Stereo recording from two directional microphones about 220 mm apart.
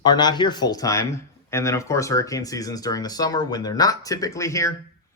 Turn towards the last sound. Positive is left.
turn(degrees=15)  # may be behind; listen again after turning